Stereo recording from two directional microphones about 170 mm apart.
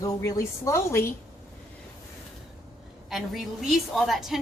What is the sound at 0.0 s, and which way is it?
A woman's voice, 20° left (ahead or behind).